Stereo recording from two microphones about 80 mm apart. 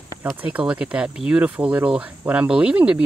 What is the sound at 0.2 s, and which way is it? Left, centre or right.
Speech, centre.